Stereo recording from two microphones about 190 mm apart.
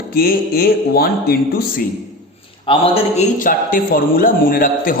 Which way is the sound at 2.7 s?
30° left (ahead or behind).